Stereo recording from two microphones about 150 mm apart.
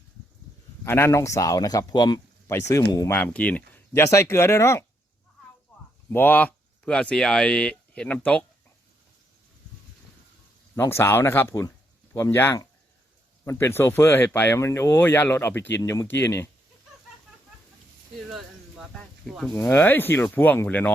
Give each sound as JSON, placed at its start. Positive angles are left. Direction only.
{"t": 0.9, "sound": "speech", "side_deg": 15}
{"t": 3.2, "sound": "speech", "side_deg": 10}
{"t": 6.1, "sound": "speech", "side_deg": 15}
{"t": 10.8, "sound": "speech", "side_deg": 15}
{"t": 18.3, "sound": "a sound", "side_deg": 0}
{"t": 19.5, "sound": "speech", "side_deg": 15}